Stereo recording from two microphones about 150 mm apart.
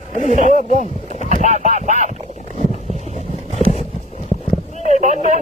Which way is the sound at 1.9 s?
55° right (ahead or behind).